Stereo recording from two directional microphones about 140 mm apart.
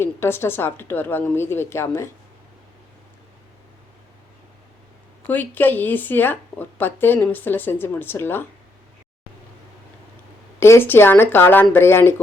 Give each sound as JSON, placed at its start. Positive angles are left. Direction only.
{"t": 0.0, "sound": "speech", "side_deg": 15}
{"t": 5.2, "sound": "speech", "side_deg": 15}
{"t": 10.6, "sound": "speech", "side_deg": 15}